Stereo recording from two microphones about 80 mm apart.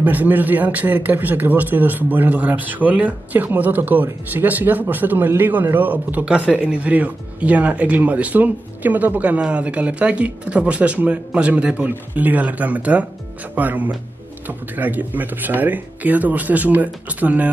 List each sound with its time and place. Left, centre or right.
0.0 s speech: right